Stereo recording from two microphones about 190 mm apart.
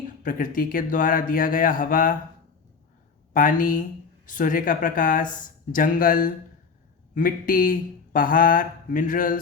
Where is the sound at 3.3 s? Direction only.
45° left (ahead or behind).